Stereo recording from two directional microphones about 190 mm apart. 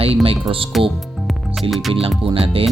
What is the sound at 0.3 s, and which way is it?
Speech, 30° right (ahead or behind).